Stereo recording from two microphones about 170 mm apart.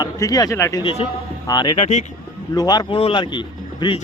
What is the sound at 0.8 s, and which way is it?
Speech, 30° left (ahead or behind).